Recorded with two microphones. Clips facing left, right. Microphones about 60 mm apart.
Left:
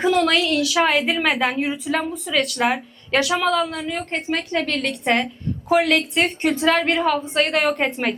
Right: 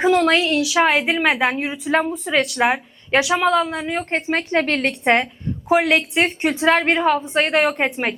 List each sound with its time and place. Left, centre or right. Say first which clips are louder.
0.0 s a woman's voice: right 2 dB; centre
0.6 s a woman's voice: right 2 dB; centre; by 2.4 s right
2.4 s a woman's voice: right 1 dB; centre
5.6 s a woman's voice: right 1 dB; centre